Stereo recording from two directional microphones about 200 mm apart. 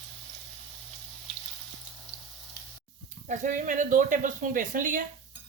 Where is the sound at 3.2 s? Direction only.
40° right (ahead or behind).